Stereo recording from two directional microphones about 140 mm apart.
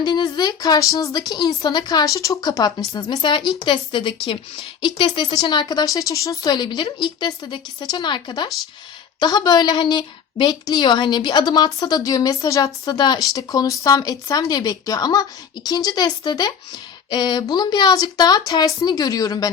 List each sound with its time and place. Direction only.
0.0 s a woman's voice: 30° left (ahead or behind)